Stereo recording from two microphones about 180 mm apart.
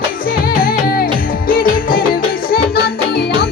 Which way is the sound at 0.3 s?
55° left (ahead or behind).